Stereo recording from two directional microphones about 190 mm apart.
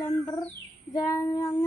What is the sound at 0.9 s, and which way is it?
Child singing, 20° left (ahead or behind).